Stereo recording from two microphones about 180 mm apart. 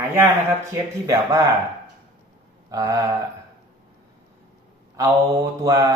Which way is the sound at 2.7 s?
20° right (ahead or behind).